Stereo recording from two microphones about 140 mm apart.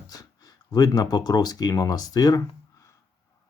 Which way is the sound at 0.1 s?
25° left (ahead or behind).